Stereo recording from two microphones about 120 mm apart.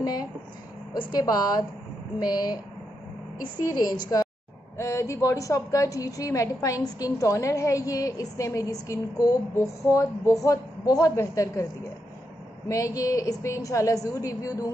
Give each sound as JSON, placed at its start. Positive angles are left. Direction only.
{"t": 0.0, "sound": "a woman's voice", "side_deg": 30}
{"t": 3.6, "sound": "a woman's voice", "side_deg": 30}
{"t": 12.6, "sound": "a woman's voice", "side_deg": 30}